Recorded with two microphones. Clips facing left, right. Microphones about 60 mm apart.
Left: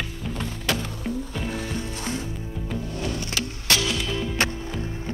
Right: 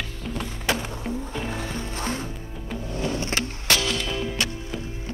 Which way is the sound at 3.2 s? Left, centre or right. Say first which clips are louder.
Right 2 dB; right.